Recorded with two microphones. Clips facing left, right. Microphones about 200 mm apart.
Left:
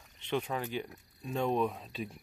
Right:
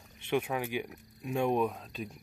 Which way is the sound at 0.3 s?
10° right (ahead or behind).